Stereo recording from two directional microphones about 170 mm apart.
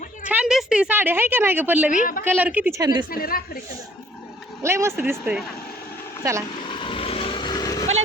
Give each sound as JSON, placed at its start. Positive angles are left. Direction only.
{"t": 0.3, "sound": "a woman's voice", "side_deg": -5}
{"t": 1.9, "sound": "speech", "side_deg": 50}
{"t": 2.2, "sound": "speech", "side_deg": -10}
{"t": 3.1, "sound": "a woman's voice", "side_deg": 60}
{"t": 4.6, "sound": "speech", "side_deg": -15}
{"t": 6.7, "sound": "vehicle", "side_deg": 30}